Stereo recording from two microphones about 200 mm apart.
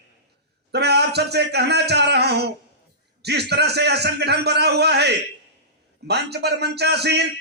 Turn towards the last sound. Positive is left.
turn(degrees=-55)  # may be behind; listen again after turning